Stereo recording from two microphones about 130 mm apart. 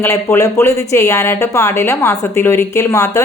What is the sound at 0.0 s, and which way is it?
Speech, 20° left (ahead or behind).